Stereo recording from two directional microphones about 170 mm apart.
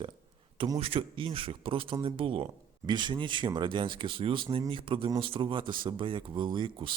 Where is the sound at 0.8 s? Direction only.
35° right (ahead or behind).